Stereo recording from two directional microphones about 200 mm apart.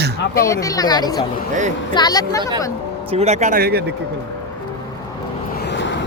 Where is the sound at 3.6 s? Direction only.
50° right (ahead or behind).